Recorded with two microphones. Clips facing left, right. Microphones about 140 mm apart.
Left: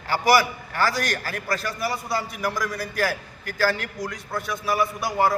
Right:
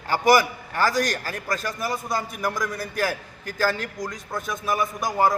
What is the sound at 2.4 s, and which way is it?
A man's voice, 20° right (ahead or behind).